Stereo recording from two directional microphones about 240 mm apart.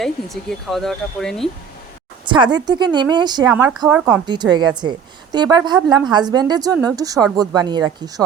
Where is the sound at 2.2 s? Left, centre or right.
Centre.